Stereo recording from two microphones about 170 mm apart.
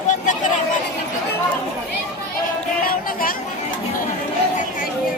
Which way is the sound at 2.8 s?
55° left (ahead or behind).